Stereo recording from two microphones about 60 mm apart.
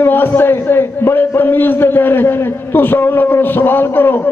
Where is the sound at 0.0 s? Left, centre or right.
Left.